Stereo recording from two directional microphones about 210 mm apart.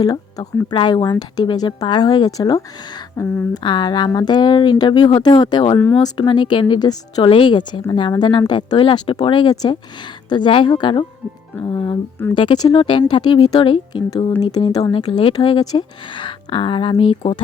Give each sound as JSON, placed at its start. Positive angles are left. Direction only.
{"t": 0.0, "sound": "speech", "side_deg": 20}
{"t": 5.8, "sound": "speech", "side_deg": 10}
{"t": 6.1, "sound": "speech", "side_deg": 20}